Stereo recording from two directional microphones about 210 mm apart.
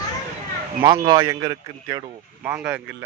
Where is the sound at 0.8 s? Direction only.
20° right (ahead or behind).